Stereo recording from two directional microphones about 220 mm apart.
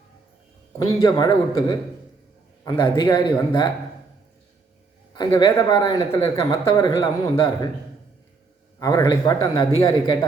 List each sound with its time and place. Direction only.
1.0 s speech: 15° left (ahead or behind)
5.1 s speech: 20° left (ahead or behind)
8.8 s a man's voice: 15° left (ahead or behind)